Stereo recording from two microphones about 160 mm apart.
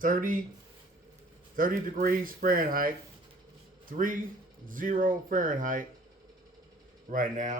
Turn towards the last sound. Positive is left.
turn(degrees=-50)  # may be behind; listen again after turning